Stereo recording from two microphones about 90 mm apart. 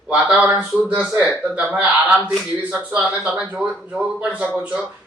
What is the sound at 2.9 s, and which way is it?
Speech, 10° right (ahead or behind).